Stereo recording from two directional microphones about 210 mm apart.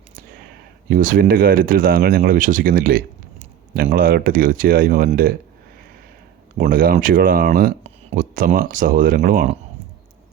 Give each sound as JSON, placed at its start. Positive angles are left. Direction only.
{"t": 0.9, "sound": "speech", "side_deg": -40}
{"t": 6.6, "sound": "speech", "side_deg": -40}